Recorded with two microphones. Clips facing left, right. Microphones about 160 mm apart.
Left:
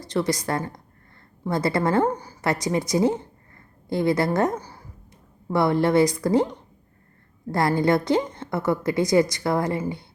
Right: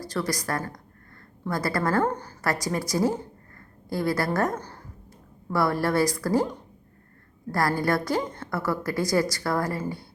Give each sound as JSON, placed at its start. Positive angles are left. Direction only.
{"t": 0.0, "sound": "a woman's voice", "side_deg": 20}
{"t": 2.0, "sound": "a woman's voice", "side_deg": 10}
{"t": 2.5, "sound": "a woman's voice", "side_deg": 20}
{"t": 4.5, "sound": "a sound", "side_deg": 10}
{"t": 5.5, "sound": "a woman's voice", "side_deg": 20}